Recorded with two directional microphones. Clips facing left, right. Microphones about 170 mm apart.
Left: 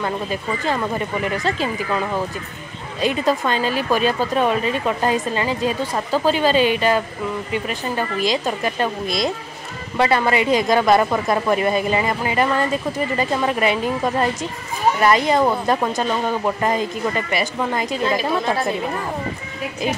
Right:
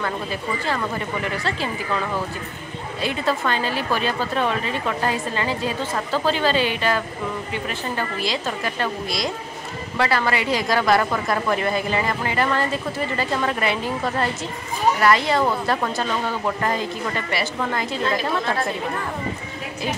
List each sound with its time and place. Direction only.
0.0 s speech: 20° left (ahead or behind)
3.0 s speech: 15° left (ahead or behind)